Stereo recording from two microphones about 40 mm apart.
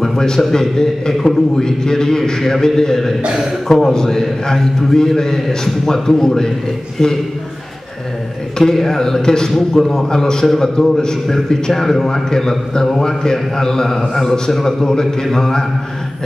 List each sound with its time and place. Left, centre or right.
0.0 s a man's voice: centre
8.5 s a man's voice: centre
10.0 s a man's voice: centre